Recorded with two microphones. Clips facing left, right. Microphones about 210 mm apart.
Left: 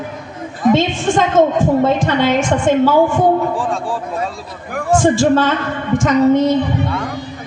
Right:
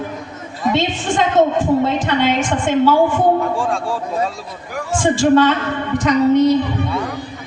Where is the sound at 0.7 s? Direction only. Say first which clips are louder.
Left 4 dB; 45° left (ahead or behind).